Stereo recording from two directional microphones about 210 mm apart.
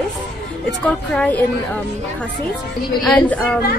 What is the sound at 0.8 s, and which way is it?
Speech, 5° left (ahead or behind).